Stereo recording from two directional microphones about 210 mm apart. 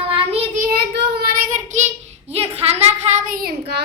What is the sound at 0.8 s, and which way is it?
Child singing, 50° right (ahead or behind).